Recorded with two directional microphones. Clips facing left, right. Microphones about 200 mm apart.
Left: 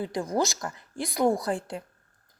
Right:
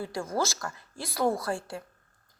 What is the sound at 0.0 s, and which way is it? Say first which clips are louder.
A woman's voice: left 3 dB; 15° left (ahead or behind).